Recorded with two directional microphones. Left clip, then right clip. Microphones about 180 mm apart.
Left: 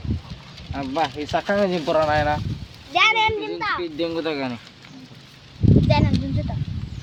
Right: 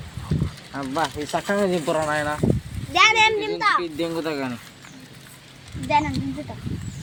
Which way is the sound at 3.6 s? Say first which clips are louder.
Right 5 dB; 75° right (ahead or behind).